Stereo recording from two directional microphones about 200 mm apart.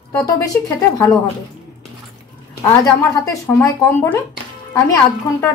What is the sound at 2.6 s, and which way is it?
Speech, 15° left (ahead or behind).